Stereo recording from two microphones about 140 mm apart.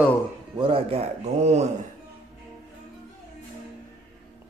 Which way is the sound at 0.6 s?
40° right (ahead or behind).